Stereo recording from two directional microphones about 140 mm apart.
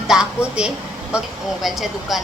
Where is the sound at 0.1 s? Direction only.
5° right (ahead or behind).